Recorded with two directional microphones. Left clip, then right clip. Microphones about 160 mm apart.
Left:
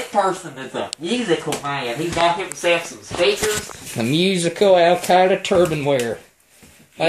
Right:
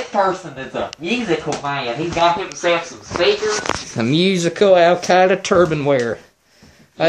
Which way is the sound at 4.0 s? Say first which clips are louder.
Right 1 dB; 5° right (ahead or behind).